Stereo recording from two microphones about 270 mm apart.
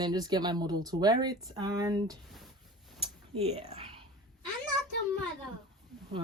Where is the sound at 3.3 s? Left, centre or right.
Right.